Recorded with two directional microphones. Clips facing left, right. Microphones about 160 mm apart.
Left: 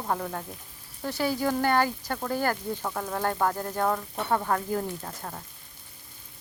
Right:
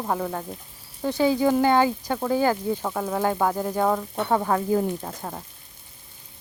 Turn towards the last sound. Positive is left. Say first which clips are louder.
# right 4 dB
turn(degrees=-20)  # may be behind; listen again after turning